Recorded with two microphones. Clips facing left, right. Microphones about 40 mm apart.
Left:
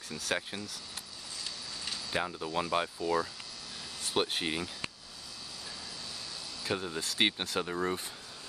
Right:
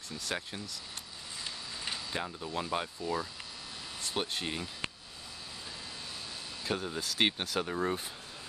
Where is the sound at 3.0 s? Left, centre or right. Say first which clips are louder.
Left 4 dB; centre.